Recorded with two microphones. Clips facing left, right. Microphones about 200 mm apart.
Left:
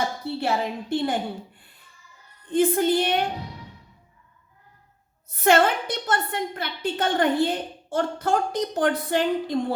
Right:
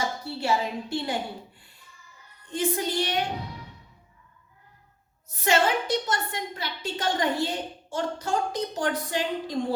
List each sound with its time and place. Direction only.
0.3 s a woman's voice: 55° left (ahead or behind)
2.5 s a woman's voice: 55° left (ahead or behind)
5.3 s a woman's voice: 55° left (ahead or behind)